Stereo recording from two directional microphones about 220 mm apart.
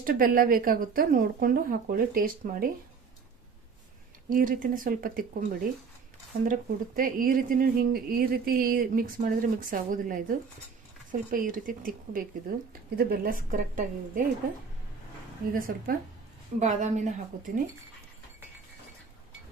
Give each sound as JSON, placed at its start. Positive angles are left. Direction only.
{"t": 0.0, "sound": "speech", "side_deg": -40}
{"t": 4.3, "sound": "speech", "side_deg": -40}
{"t": 15.5, "sound": "speech", "side_deg": -40}